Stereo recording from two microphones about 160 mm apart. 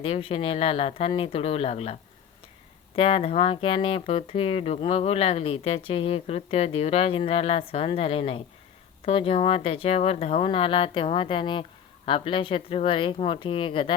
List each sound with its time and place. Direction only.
0.0 s speech: 35° left (ahead or behind)